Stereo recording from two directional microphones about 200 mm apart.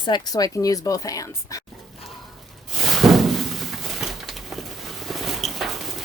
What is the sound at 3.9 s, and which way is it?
Pigeon, centre (ahead or behind).